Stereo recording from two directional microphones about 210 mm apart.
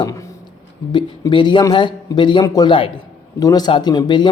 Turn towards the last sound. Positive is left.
turn(degrees=20)  # may be behind; listen again after turning